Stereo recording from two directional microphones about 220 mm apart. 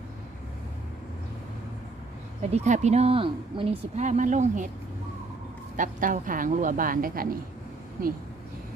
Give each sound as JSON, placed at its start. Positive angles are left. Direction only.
{"t": 2.5, "sound": "a woman's voice", "side_deg": -30}
{"t": 5.7, "sound": "a woman's voice", "side_deg": -35}